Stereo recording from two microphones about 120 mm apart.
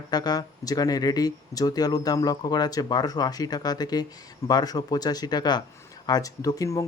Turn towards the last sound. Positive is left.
turn(degrees=30)  # may be behind; listen again after turning